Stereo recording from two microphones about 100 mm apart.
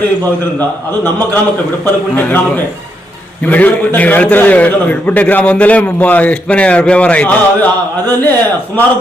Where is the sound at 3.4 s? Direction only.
15° left (ahead or behind).